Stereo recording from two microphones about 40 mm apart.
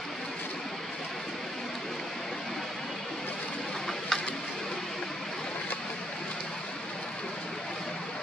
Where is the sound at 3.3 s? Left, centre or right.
Left.